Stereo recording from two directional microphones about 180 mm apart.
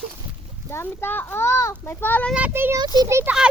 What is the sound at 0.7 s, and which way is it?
A child's voice, 15° left (ahead or behind).